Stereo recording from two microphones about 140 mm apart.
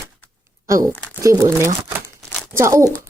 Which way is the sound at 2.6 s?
20° right (ahead or behind).